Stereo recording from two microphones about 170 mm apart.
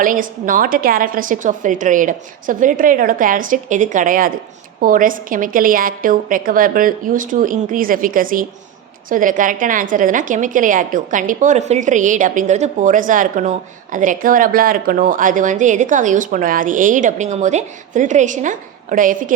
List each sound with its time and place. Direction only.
0.0 s speech: 50° right (ahead or behind)